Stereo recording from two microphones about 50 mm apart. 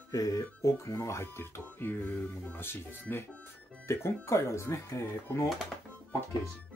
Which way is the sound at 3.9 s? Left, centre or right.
Left.